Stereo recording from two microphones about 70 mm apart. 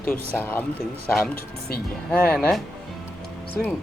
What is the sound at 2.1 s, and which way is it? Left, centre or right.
Speech, left.